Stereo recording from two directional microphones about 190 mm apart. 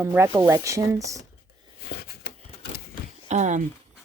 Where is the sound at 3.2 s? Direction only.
40° right (ahead or behind).